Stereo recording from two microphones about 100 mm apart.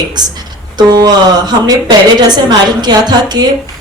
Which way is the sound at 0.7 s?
45° right (ahead or behind).